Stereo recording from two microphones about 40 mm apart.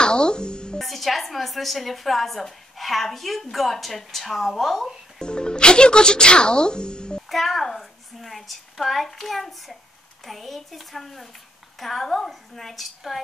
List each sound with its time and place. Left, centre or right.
0.0 s music: left
0.7 s a woman's voice: centre
5.2 s speech: left
7.2 s a woman's voice: centre